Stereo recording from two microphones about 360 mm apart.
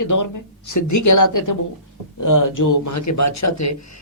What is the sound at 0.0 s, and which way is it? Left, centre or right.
A man's voice, left.